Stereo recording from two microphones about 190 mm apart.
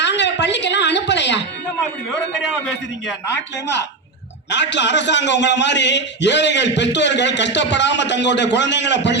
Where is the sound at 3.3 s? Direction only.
65° left (ahead or behind).